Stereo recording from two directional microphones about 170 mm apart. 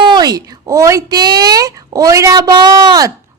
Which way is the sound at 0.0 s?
25° right (ahead or behind).